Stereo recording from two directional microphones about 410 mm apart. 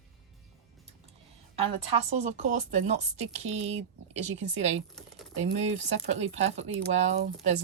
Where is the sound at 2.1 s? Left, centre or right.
Centre.